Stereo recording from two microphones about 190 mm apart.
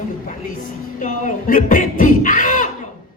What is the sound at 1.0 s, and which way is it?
Speech, 40° left (ahead or behind).